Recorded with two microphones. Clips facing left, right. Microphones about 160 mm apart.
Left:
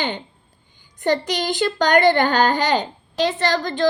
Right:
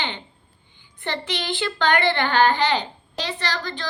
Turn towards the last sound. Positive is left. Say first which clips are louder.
# left 8 dB
turn(degrees=45)  # may be behind; listen again after turning